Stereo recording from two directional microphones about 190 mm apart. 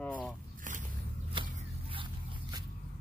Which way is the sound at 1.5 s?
25° right (ahead or behind).